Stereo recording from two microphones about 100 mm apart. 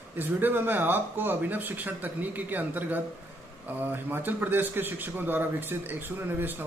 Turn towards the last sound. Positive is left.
turn(degrees=-20)  # may be behind; listen again after turning